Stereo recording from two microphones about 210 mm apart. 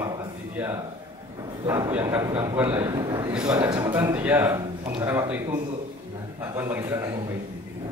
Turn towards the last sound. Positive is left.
turn(degrees=-15)  # may be behind; listen again after turning